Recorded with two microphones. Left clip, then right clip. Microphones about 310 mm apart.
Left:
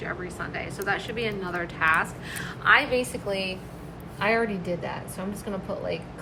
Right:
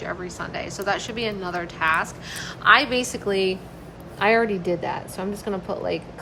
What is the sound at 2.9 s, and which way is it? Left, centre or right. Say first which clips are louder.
Speech: right 3 dB; right.